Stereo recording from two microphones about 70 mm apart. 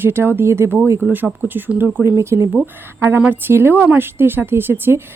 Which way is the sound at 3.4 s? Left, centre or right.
Right.